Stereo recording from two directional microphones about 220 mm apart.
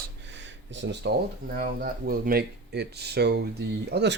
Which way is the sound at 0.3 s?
55° right (ahead or behind).